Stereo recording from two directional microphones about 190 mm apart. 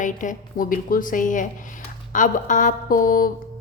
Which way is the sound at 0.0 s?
40° left (ahead or behind).